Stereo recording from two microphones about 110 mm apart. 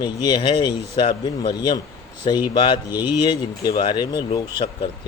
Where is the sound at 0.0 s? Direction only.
40° left (ahead or behind).